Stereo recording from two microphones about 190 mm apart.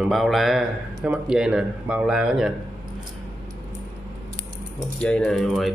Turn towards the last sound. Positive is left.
turn(degrees=0)  # may be behind; listen again after turning